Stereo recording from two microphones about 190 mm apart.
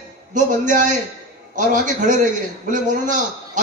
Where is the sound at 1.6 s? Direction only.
40° right (ahead or behind).